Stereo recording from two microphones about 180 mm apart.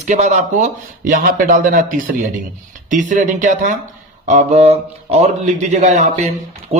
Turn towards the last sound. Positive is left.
turn(degrees=-40)  # may be behind; listen again after turning